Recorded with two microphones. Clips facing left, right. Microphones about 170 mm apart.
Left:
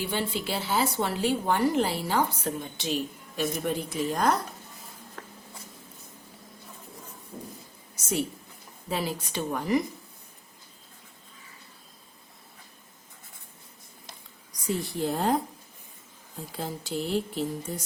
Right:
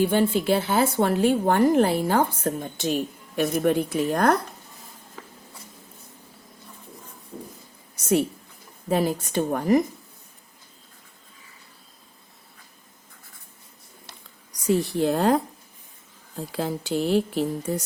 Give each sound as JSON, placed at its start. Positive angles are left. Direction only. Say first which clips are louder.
{"t": 0.0, "sound": "speech", "louder": "right 9 dB", "side_deg": -50}
{"t": 5.2, "sound": "writing", "louder": "right 1 dB", "side_deg": 0}
{"t": 7.9, "sound": "a woman's voice", "louder": "right 9 dB", "side_deg": -60}
{"t": 8.9, "sound": "speech", "louder": "right 8 dB", "side_deg": -50}
{"t": 14.9, "sound": "speech", "louder": "right 4 dB", "side_deg": -75}
{"t": 16.5, "sound": "speech", "louder": "right 7 dB", "side_deg": -75}